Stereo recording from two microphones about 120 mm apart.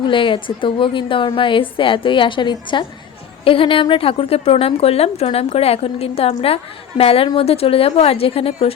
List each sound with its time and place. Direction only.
0.0 s a woman's voice: 45° left (ahead or behind)